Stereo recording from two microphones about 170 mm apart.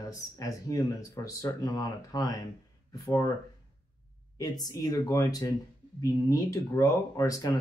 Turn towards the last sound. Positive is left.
turn(degrees=20)  # may be behind; listen again after turning